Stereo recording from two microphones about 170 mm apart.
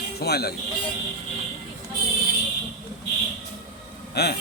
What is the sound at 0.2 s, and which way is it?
Speech, 70° left (ahead or behind).